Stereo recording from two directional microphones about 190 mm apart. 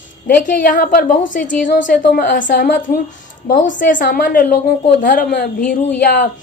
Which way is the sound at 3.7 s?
45° left (ahead or behind).